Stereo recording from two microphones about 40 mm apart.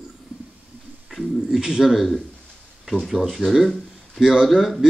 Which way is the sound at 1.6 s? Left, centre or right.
Centre.